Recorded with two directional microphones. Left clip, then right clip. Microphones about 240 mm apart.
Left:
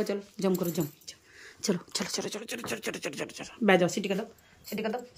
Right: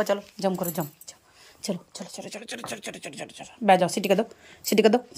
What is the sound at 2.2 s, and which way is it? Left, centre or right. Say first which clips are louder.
Speech: even; centre.